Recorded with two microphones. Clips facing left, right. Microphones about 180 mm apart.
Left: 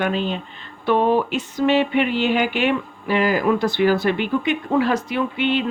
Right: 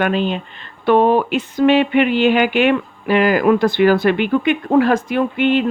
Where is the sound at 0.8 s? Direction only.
65° right (ahead or behind).